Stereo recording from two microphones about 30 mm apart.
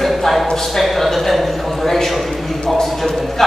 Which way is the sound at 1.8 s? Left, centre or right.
Centre.